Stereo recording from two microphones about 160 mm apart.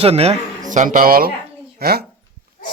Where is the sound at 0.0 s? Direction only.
40° right (ahead or behind).